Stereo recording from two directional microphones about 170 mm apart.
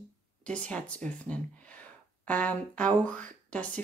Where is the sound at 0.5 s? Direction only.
5° left (ahead or behind).